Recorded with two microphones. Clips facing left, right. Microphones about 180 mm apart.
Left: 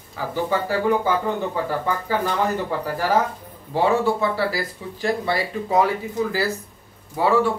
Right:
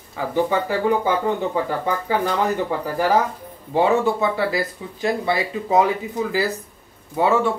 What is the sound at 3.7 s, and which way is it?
Speech, 20° right (ahead or behind).